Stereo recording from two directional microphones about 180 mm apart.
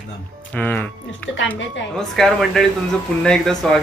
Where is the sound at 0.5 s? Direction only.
5° left (ahead or behind).